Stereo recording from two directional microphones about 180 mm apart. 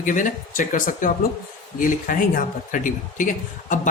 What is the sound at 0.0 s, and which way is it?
A man's voice, 45° left (ahead or behind).